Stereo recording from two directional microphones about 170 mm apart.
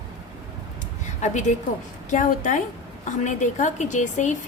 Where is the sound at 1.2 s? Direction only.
45° left (ahead or behind).